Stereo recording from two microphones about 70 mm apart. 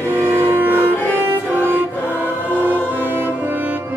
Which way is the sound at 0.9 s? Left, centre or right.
Left.